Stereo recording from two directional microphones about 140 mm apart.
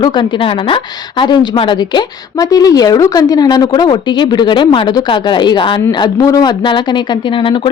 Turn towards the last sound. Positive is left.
turn(degrees=35)  # may be behind; listen again after turning